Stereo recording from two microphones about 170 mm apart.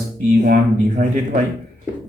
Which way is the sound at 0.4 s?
55° right (ahead or behind).